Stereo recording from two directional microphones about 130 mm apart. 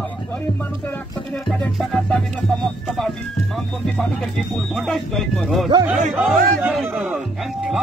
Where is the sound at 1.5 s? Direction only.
Centre (ahead or behind).